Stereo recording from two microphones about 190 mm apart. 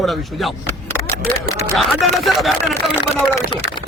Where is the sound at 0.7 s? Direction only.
10° left (ahead or behind).